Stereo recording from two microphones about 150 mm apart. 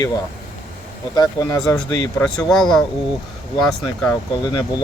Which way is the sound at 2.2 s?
Centre (ahead or behind).